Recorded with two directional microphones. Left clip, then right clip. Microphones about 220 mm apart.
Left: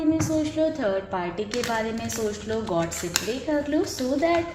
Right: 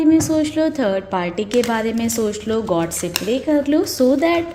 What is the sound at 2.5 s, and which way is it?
Speech, 55° right (ahead or behind).